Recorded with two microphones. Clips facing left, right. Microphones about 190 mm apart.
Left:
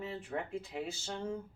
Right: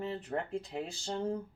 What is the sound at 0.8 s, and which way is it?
Speech, 35° right (ahead or behind).